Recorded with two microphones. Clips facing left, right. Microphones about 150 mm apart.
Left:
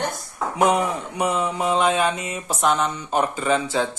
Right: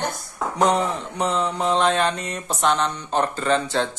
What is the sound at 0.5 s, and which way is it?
Speech, 10° left (ahead or behind).